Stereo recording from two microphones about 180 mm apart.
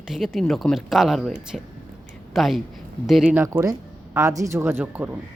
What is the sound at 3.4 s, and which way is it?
A man's voice, 15° right (ahead or behind).